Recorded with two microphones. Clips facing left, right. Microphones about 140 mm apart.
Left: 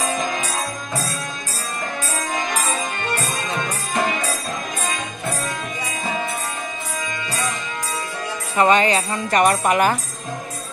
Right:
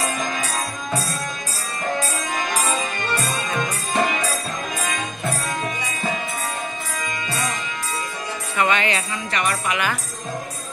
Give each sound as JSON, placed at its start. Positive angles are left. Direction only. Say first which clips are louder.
{"t": 8.5, "sound": "speech", "louder": "left 5 dB", "side_deg": 35}
{"t": 9.1, "sound": "speech", "louder": "left 7 dB", "side_deg": 45}